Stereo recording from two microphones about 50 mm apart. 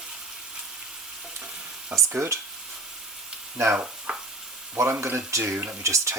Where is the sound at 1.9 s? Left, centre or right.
Centre.